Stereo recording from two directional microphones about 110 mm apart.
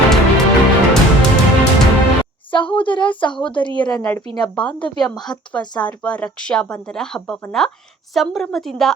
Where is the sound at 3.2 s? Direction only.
50° left (ahead or behind).